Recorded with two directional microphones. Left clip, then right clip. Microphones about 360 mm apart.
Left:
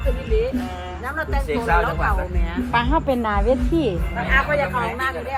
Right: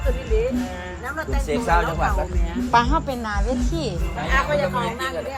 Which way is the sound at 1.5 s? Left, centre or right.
Right.